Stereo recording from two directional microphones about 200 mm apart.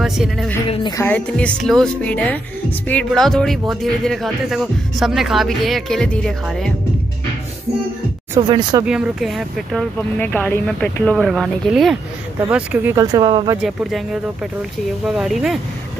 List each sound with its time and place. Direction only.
0.0 s speech: centre (ahead or behind)
0.7 s speech: 20° left (ahead or behind)
1.0 s speech: 5° left (ahead or behind)
8.4 s speech: 20° right (ahead or behind)
8.8 s speech: 5° right (ahead or behind)
12.9 s speech: 20° right (ahead or behind)
13.6 s speech: centre (ahead or behind)